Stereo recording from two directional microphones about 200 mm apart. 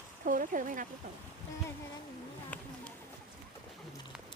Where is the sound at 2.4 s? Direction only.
5° left (ahead or behind).